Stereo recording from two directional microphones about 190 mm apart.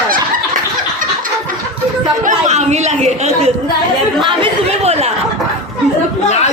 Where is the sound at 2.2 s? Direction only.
35° right (ahead or behind).